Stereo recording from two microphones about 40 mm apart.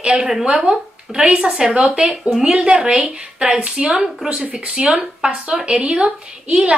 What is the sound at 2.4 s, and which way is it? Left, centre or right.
Speech, right.